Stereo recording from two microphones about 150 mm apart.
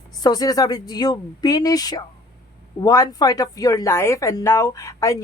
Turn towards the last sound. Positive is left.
turn(degrees=20)  # may be behind; listen again after turning